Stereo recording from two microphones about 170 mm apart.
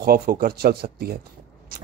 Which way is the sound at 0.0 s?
60° right (ahead or behind).